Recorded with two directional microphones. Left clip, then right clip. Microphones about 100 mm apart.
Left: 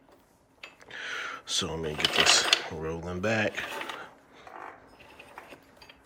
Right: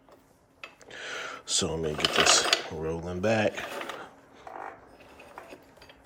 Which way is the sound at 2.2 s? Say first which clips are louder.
Even; 30° right (ahead or behind).